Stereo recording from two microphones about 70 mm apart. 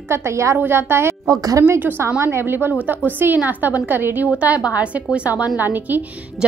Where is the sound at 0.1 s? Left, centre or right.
Right.